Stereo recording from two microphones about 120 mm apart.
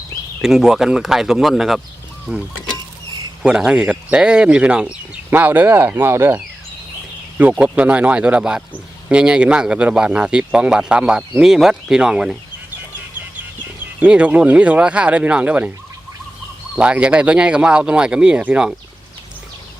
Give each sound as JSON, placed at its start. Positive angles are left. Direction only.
{"t": 0.4, "sound": "speech", "side_deg": -5}
{"t": 7.6, "sound": "speech", "side_deg": -10}
{"t": 14.0, "sound": "speech", "side_deg": -10}
{"t": 16.7, "sound": "speech", "side_deg": -10}